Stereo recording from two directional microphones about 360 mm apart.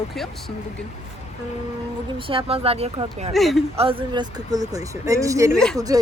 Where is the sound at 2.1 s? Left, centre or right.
Centre.